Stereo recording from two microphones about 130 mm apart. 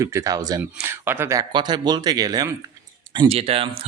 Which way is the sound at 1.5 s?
35° right (ahead or behind).